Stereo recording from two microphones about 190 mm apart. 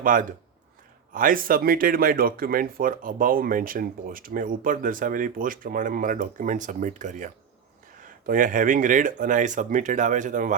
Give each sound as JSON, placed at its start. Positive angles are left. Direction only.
{"t": 0.0, "sound": "speech", "side_deg": -45}